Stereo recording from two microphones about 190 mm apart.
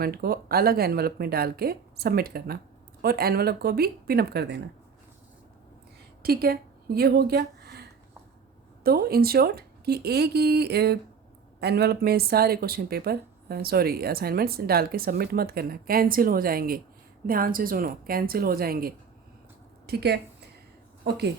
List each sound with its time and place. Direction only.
0.0 s speech: 55° right (ahead or behind)
6.2 s a woman's voice: 55° right (ahead or behind)